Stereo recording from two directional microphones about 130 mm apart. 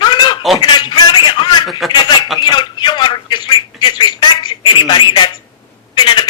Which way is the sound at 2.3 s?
35° left (ahead or behind).